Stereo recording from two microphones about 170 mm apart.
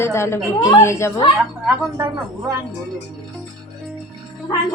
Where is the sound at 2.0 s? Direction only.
15° right (ahead or behind).